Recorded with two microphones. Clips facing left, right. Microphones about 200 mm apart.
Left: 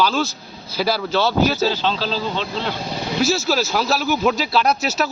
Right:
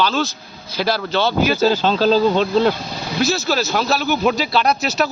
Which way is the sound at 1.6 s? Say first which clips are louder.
Right 5 dB; 45° right (ahead or behind).